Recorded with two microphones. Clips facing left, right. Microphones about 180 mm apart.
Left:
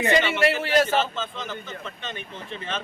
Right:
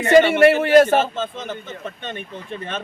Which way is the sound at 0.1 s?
55° right (ahead or behind).